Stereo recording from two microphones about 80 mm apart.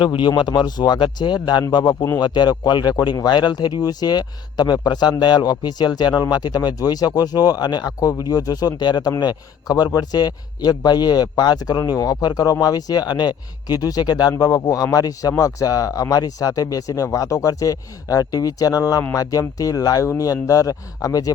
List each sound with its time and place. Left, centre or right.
0.0 s speech: left
0.3 s a man's voice: left